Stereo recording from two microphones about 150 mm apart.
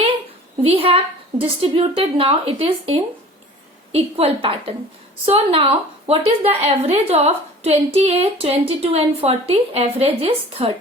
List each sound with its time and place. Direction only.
0.6 s a woman's voice: 40° right (ahead or behind)